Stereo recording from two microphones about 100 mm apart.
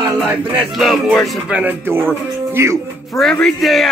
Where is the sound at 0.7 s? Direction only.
Centre (ahead or behind).